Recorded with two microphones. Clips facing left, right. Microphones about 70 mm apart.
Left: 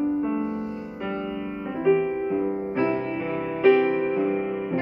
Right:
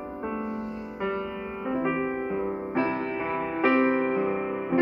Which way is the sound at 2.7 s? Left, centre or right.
Right.